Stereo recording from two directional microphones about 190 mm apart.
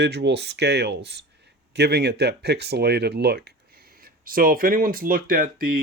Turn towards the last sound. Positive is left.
turn(degrees=-50)  # may be behind; listen again after turning